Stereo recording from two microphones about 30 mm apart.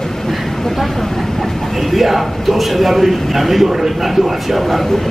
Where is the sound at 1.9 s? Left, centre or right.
Centre.